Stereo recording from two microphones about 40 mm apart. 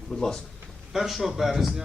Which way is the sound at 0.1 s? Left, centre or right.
Centre.